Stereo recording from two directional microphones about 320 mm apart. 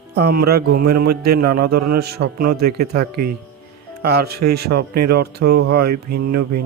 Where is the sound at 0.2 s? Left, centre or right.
Right.